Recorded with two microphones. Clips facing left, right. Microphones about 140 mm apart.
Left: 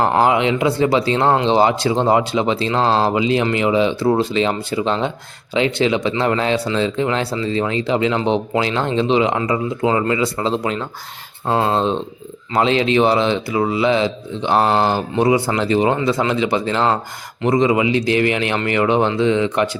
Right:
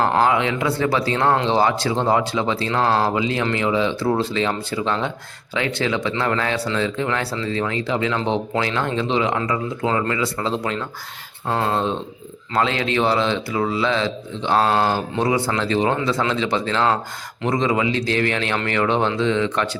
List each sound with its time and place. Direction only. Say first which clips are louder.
0.0 s a man's voice: left 3 dB; 20° left (ahead or behind)